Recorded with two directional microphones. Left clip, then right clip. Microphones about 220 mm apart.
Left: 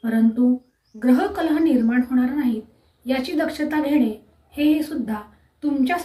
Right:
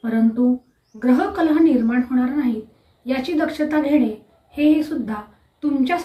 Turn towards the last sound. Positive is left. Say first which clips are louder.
# right 1 dB
turn(degrees=5)  # may be behind; listen again after turning